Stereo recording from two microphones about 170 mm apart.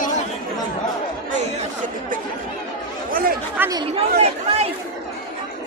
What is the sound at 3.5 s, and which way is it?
Speech, 15° right (ahead or behind).